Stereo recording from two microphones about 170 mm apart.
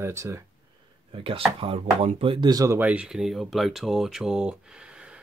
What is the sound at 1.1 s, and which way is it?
Speech, 30° right (ahead or behind).